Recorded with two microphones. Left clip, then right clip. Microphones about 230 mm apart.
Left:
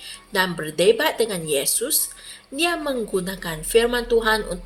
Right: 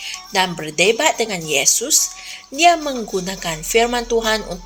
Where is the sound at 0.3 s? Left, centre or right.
Right.